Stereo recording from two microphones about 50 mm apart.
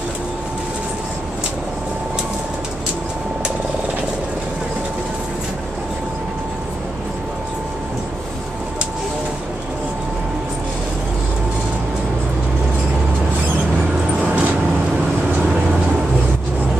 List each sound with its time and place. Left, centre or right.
14.2 s vehicle: right